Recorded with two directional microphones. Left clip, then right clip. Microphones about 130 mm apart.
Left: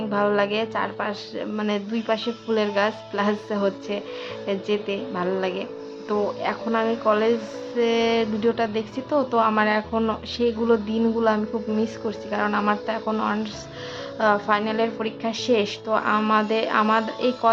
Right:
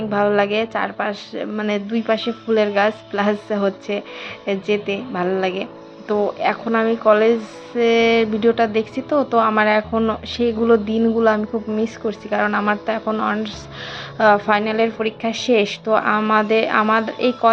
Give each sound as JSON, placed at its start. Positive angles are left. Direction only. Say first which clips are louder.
{"t": 0.1, "sound": "a woman's voice", "louder": "right 4 dB", "side_deg": -15}